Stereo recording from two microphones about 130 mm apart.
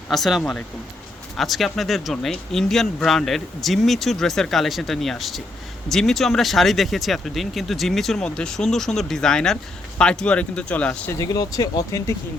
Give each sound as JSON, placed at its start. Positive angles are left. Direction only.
{"t": 0.1, "sound": "speech", "side_deg": 0}
{"t": 11.1, "sound": "speech", "side_deg": 25}